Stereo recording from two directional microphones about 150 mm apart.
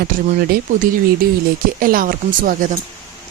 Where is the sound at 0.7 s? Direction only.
55° right (ahead or behind).